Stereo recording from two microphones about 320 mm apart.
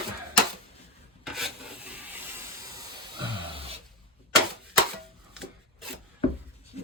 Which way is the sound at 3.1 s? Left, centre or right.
Centre.